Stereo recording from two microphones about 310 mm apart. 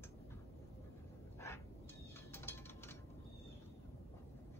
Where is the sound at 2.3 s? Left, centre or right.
Centre.